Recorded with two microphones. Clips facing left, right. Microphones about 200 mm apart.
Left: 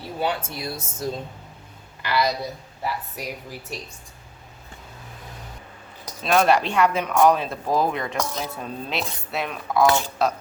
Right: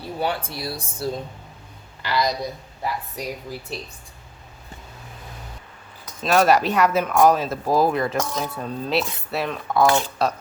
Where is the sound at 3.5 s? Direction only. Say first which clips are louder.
Right 3 dB; 15° left (ahead or behind).